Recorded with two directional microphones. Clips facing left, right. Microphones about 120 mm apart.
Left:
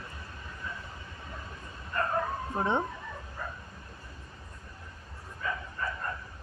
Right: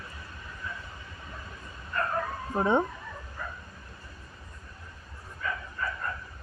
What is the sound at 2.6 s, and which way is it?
Speech, 10° right (ahead or behind).